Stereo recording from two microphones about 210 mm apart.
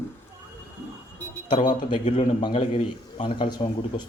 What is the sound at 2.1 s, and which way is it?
Speech, 25° left (ahead or behind).